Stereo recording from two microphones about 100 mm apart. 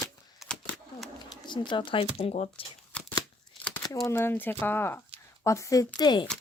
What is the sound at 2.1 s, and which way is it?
Speech, 70° left (ahead or behind).